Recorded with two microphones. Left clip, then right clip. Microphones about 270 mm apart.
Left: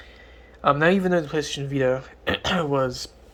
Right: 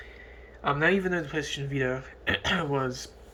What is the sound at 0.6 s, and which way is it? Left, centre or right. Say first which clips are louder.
Speech: left 6 dB; left.